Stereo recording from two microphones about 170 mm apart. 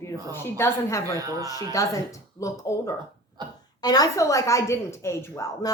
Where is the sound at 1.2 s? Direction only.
20° right (ahead or behind).